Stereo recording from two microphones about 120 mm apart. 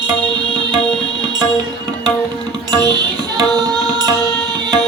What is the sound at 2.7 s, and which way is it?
Tabla, 35° right (ahead or behind).